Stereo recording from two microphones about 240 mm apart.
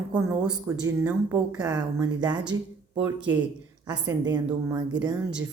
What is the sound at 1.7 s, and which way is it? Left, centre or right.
Speech, centre.